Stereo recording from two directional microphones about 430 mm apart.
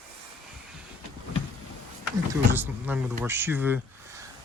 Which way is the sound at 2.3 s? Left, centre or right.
Centre.